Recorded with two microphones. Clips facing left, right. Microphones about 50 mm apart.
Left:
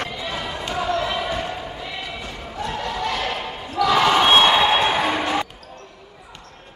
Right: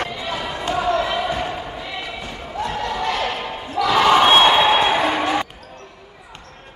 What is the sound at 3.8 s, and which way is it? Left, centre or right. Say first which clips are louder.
Basketball bounce: right 2 dB; centre.